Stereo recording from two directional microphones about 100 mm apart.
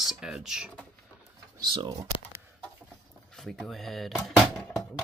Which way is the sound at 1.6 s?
50° right (ahead or behind).